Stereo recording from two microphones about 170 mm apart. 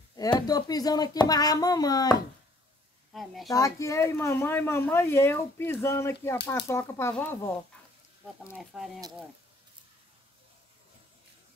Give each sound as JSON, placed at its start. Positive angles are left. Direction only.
{"t": 0.1, "sound": "speech", "side_deg": 20}
{"t": 3.1, "sound": "a woman's voice", "side_deg": 0}
{"t": 3.4, "sound": "speech", "side_deg": 20}
{"t": 8.7, "sound": "speech", "side_deg": 0}